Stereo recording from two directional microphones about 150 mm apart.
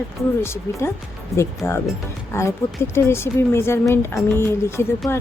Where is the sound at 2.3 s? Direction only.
20° left (ahead or behind).